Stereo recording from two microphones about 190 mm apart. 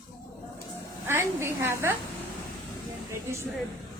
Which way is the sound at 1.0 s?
15° right (ahead or behind).